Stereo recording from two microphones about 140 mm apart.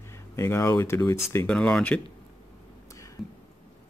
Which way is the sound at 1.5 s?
5° left (ahead or behind).